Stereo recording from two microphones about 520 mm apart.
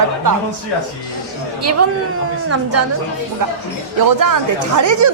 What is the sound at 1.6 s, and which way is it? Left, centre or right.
Speech, right.